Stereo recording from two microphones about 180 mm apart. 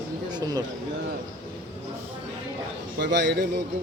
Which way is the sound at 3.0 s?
75° right (ahead or behind).